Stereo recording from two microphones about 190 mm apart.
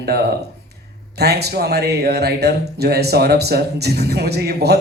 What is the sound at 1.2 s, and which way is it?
Speech, 60° right (ahead or behind).